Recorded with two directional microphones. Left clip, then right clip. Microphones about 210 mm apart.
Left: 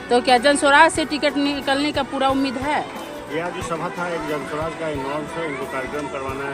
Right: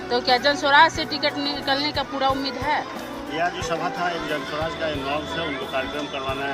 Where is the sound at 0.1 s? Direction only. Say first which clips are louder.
Left 4 dB; 50° left (ahead or behind).